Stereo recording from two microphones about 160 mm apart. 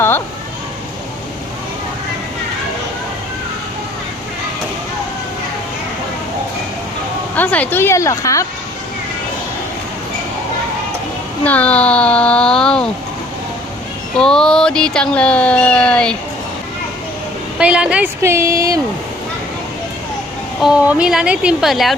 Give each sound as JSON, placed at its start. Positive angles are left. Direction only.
{"t": 7.3, "sound": "speech", "side_deg": 10}
{"t": 11.4, "sound": "speech", "side_deg": 10}
{"t": 14.2, "sound": "speech", "side_deg": 5}
{"t": 17.6, "sound": "a woman's voice", "side_deg": -5}
{"t": 20.6, "sound": "speech", "side_deg": -5}